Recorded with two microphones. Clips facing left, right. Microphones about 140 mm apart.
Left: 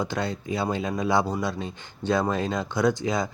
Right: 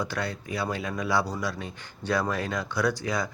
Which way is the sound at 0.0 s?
20° left (ahead or behind).